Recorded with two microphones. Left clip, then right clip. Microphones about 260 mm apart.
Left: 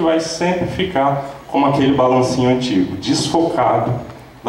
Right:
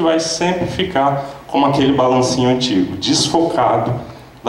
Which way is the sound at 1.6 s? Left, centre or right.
Centre.